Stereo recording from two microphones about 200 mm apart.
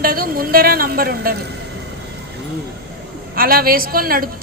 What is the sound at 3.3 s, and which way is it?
Speech, 50° right (ahead or behind).